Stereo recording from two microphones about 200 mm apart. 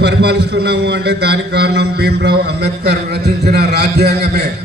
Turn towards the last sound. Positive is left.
turn(degrees=-55)  # may be behind; listen again after turning